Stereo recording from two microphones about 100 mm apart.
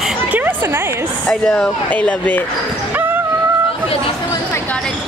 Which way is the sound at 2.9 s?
20° right (ahead or behind).